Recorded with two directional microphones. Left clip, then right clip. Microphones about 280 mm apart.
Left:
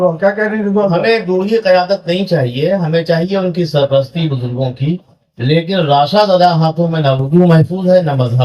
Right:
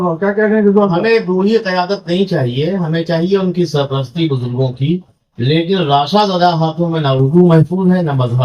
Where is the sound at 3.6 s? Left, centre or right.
Left.